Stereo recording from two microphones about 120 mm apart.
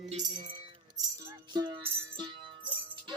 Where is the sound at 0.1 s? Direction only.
80° right.